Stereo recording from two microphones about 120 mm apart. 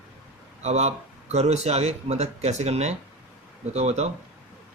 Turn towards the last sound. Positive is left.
turn(degrees=-65)  # may be behind; listen again after turning